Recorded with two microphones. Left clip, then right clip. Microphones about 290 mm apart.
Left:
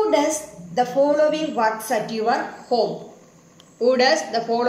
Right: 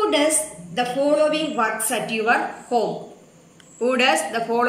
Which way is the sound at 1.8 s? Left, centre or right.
Centre.